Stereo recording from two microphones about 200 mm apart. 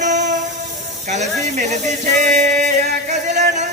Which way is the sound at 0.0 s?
35° right (ahead or behind).